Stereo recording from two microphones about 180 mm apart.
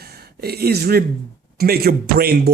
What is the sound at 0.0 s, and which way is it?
Speech, 60° right (ahead or behind).